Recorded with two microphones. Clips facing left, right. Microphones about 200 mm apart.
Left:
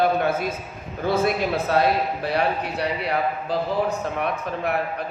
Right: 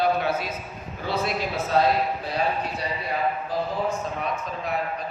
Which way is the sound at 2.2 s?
65° left (ahead or behind).